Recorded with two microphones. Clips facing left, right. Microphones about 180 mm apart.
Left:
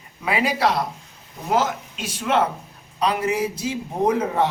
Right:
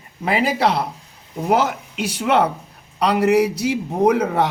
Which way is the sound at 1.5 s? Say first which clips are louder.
Right 3 dB; 65° right (ahead or behind).